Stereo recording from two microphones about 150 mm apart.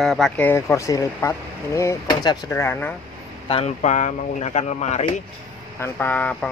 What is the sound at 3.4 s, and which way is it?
Speech, 40° left (ahead or behind).